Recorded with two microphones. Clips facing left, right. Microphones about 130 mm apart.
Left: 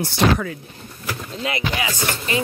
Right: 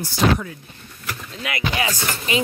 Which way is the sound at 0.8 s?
45° left (ahead or behind).